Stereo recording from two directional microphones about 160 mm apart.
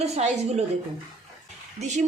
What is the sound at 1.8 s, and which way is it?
Speech, 45° right (ahead or behind).